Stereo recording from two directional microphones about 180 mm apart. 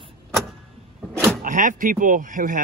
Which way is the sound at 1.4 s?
45° right (ahead or behind).